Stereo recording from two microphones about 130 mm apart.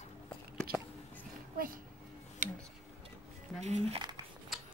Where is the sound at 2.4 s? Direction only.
75° right (ahead or behind).